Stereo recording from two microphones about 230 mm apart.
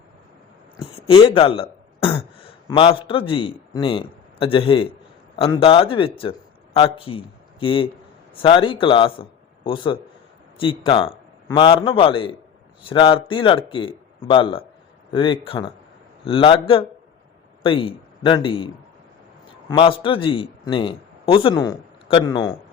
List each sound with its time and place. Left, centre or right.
0.9 s throat clearing: left
2.6 s a man's voice: left
19.7 s a man's voice: left